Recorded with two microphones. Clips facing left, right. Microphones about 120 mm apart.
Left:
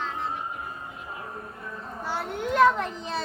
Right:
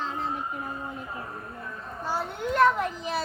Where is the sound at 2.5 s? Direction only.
Centre (ahead or behind).